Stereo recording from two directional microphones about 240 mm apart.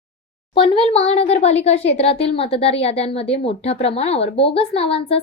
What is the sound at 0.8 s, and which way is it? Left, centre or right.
A woman's voice, left.